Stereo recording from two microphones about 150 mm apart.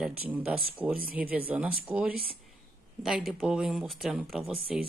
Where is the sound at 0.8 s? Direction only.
5° right (ahead or behind).